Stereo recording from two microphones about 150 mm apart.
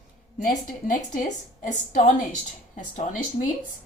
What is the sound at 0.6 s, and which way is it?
Speech, 60° left (ahead or behind).